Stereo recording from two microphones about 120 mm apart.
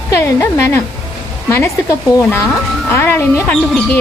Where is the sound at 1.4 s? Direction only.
25° left (ahead or behind).